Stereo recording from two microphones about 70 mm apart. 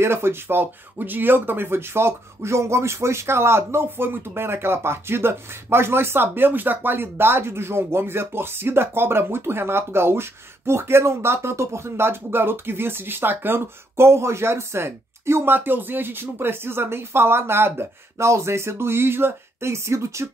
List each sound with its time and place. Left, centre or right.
0.0 s speech: right